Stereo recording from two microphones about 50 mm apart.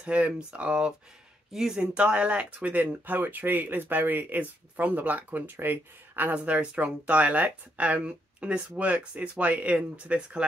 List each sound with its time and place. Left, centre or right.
0.0 s speech: right
1.5 s speech: centre
1.8 s speech: right